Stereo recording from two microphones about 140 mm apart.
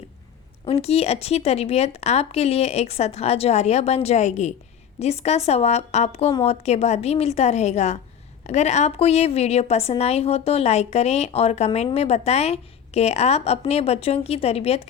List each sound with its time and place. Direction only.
0.6 s speech: 50° left (ahead or behind)